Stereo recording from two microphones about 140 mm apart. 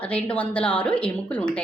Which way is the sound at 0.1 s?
10° left (ahead or behind).